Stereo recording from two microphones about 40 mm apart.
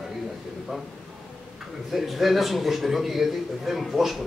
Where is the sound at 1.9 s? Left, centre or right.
Centre.